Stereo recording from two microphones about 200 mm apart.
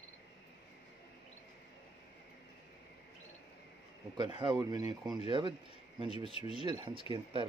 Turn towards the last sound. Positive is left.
turn(degrees=-25)  # may be behind; listen again after turning